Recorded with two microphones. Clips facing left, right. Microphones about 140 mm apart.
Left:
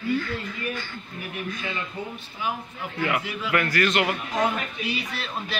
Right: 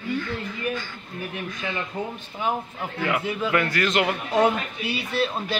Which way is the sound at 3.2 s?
25° right (ahead or behind).